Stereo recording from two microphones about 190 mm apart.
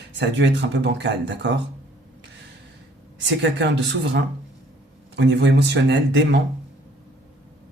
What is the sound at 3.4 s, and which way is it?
Speech, 65° right (ahead or behind).